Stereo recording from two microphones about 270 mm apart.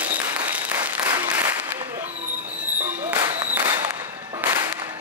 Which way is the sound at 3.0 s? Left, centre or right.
Centre.